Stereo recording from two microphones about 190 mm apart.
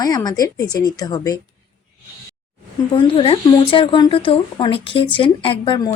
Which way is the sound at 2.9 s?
30° left (ahead or behind).